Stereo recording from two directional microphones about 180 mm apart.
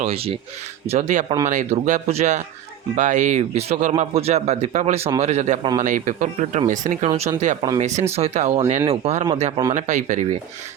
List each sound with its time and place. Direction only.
0.0 s speech: 35° right (ahead or behind)
9.7 s speech: 40° right (ahead or behind)